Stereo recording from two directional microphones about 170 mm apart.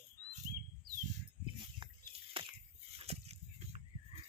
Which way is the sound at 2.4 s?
35° right (ahead or behind).